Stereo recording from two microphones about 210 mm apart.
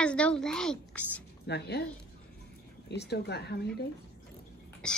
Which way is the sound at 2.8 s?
50° left (ahead or behind).